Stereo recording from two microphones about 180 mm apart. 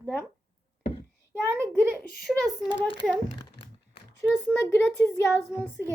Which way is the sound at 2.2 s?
5° right (ahead or behind).